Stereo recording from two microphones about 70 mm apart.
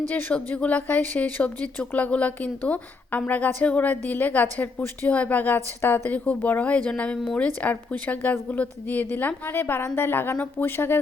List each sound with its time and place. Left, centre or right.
0.1 s speech: left